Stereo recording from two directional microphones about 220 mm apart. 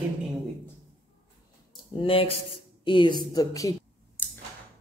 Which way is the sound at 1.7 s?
25° left (ahead or behind).